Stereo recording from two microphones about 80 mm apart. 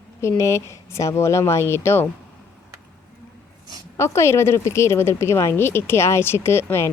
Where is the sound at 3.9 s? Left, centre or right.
Left.